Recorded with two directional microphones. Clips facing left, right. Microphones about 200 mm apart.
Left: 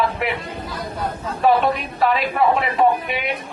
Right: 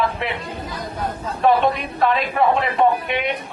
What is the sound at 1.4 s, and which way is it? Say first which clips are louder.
A man's voice: even; centre (ahead or behind).